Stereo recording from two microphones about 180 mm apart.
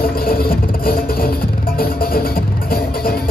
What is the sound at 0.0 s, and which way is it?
Music, 55° left (ahead or behind).